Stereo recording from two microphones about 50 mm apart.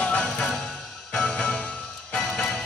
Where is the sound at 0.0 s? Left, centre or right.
Left.